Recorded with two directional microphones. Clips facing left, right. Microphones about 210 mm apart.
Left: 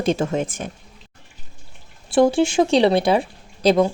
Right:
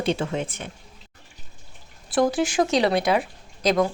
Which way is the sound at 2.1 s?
25° left (ahead or behind).